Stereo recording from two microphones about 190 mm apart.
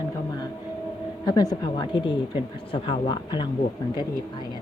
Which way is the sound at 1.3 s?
20° left (ahead or behind).